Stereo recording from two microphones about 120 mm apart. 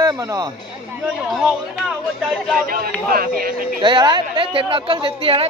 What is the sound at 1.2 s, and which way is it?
Speech, centre (ahead or behind).